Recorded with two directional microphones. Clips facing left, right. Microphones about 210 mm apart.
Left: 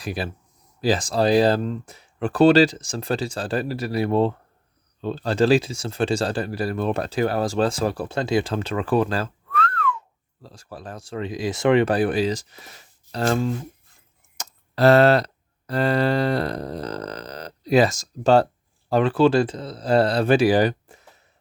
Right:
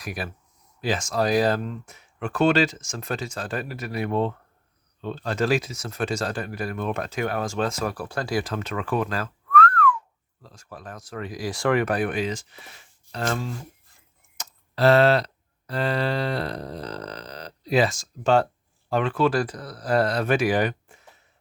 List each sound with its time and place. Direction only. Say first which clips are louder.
0.0 s speech: left 4 dB; 30° left (ahead or behind)